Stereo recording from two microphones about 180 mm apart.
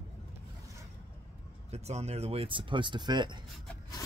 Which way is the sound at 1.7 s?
35° right (ahead or behind).